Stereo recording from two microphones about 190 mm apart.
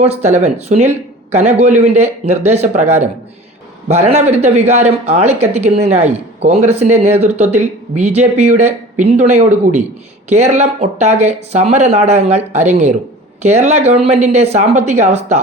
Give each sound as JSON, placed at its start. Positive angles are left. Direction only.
{"t": 0.0, "sound": "speech", "side_deg": -35}